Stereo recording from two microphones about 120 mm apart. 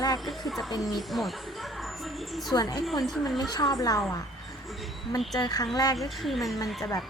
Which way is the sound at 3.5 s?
30° left (ahead or behind).